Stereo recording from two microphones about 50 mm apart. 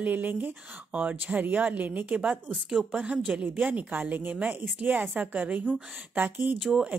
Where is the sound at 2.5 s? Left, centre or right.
Centre.